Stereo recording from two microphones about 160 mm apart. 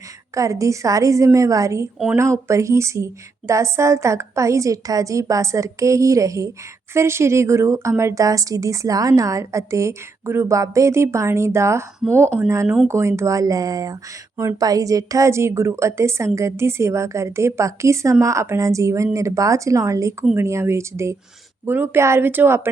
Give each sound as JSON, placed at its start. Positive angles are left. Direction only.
{"t": 0.3, "sound": "a woman's voice", "side_deg": -20}
{"t": 12.6, "sound": "speech", "side_deg": 0}
{"t": 12.9, "sound": "a woman's voice", "side_deg": -15}